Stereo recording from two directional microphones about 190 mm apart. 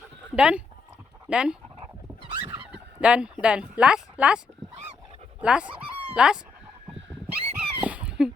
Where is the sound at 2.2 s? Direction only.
25° right (ahead or behind).